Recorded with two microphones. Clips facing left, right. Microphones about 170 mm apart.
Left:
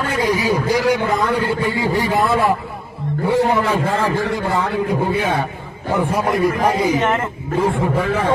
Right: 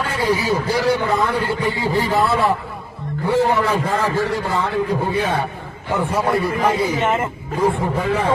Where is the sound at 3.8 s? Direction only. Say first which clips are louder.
Left 1 dB; 25° left (ahead or behind).